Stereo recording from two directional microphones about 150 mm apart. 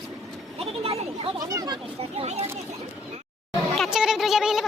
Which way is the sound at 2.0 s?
45° right (ahead or behind).